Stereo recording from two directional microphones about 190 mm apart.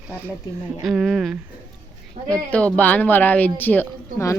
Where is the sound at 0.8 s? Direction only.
Centre (ahead or behind).